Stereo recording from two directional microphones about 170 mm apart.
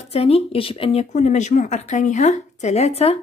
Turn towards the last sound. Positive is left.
turn(degrees=40)  # may be behind; listen again after turning